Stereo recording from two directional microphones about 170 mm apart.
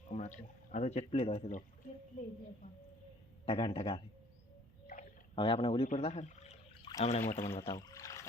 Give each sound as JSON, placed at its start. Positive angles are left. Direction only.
{"t": 0.1, "sound": "speech", "side_deg": 45}
{"t": 3.4, "sound": "a man's voice", "side_deg": 35}
{"t": 5.3, "sound": "a man's voice", "side_deg": 30}
{"t": 5.9, "sound": "pour", "side_deg": 40}
{"t": 7.0, "sound": "a man's voice", "side_deg": 40}
{"t": 7.7, "sound": "music", "side_deg": 20}